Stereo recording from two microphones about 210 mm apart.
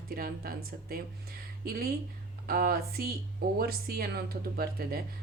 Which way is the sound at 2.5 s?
45° right (ahead or behind).